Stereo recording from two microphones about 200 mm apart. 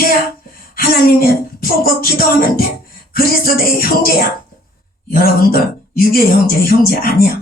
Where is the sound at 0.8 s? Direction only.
50° left (ahead or behind).